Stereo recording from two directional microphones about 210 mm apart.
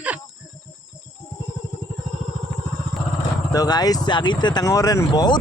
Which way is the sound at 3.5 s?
20° left (ahead or behind).